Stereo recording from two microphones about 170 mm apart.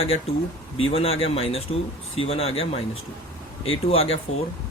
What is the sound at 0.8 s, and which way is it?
Speech, 35° left (ahead or behind).